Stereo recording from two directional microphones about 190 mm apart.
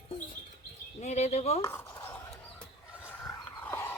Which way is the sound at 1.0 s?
35° left (ahead or behind).